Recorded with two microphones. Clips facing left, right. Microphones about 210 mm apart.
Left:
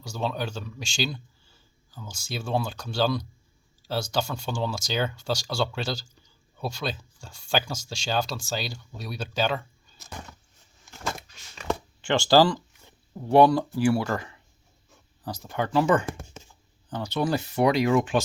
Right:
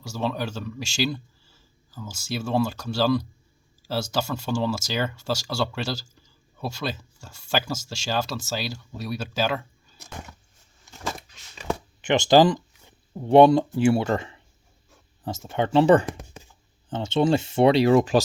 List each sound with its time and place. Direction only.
0.0 s speech: 5° right (ahead or behind)
12.0 s speech: 20° right (ahead or behind); by 18.2 s 35° right (ahead or behind)